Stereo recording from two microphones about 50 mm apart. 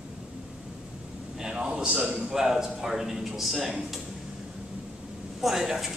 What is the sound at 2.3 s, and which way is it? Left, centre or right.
Speech, centre.